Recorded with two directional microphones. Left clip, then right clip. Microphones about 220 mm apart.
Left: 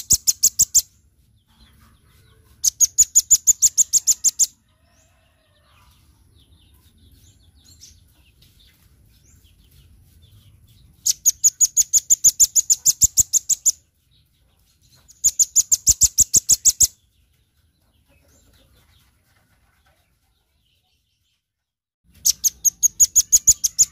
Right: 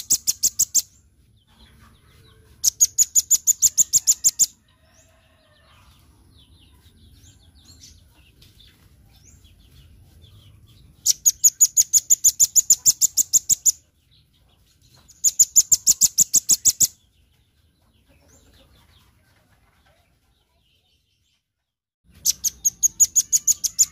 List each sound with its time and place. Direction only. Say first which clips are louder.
0.0 s bird: left 4 dB; 15° left (ahead or behind)
2.6 s bird: left 2 dB; 15° left (ahead or behind)
11.0 s bird: even; 10° left (ahead or behind)
15.0 s bird: even; 15° left (ahead or behind)
22.2 s bird: left 3 dB; 25° left (ahead or behind)